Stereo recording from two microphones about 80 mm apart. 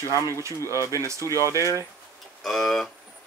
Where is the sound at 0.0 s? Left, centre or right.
Left.